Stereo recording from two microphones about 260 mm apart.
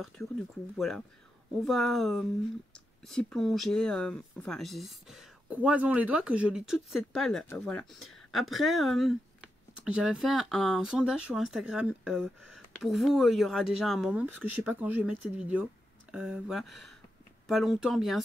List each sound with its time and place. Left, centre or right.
0.2 s speech: centre